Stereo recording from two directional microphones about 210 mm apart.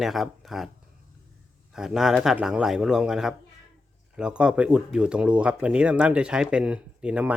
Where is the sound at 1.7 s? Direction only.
Centre (ahead or behind).